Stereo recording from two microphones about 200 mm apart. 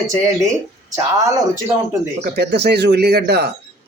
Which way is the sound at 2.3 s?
55° right (ahead or behind).